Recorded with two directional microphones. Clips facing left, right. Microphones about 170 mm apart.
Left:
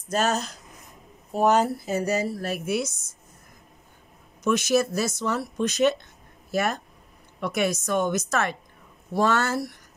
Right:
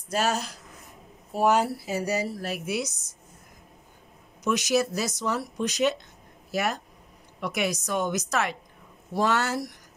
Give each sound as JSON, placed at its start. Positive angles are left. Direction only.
{"t": 0.1, "sound": "a woman's voice", "side_deg": -10}
{"t": 4.5, "sound": "speech", "side_deg": -15}